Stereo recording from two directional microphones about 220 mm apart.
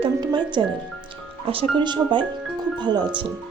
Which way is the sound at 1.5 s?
25° right (ahead or behind).